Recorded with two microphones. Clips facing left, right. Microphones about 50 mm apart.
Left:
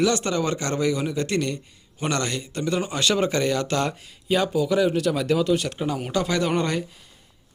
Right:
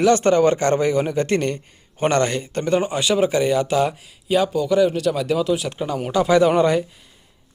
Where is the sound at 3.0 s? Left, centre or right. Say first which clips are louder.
Right 4 dB; centre.